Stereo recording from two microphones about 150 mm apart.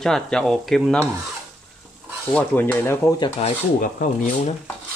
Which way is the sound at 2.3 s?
15° left (ahead or behind).